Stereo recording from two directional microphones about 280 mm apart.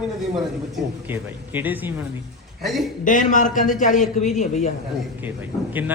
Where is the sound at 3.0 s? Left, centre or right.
Left.